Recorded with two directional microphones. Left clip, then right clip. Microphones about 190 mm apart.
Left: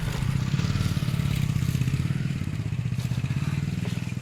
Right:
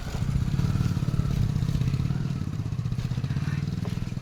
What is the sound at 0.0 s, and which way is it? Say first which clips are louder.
Vehicle: left 3 dB; 60° right (ahead or behind).